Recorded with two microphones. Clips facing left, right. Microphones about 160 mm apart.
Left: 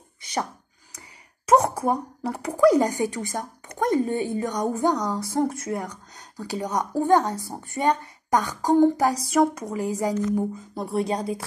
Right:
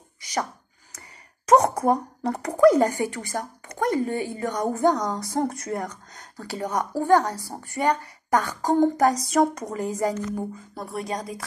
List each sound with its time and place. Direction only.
0.9 s a sound: 5° left (ahead or behind)
2.6 s a woman's voice: 15° left (ahead or behind)
10.7 s speech: 25° left (ahead or behind)